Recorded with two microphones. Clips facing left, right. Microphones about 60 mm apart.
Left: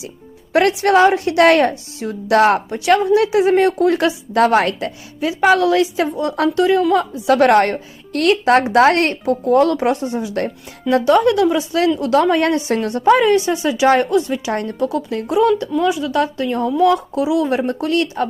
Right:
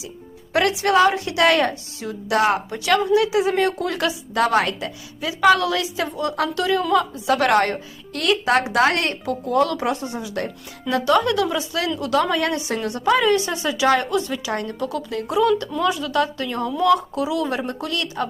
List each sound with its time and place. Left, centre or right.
0.5 s a woman's voice: left
2.3 s speech: left
2.6 s a woman's voice: left
4.4 s a woman's voice: left
9.7 s a woman's voice: left
14.5 s a woman's voice: left; by 16.1 s centre
16.1 s speech: left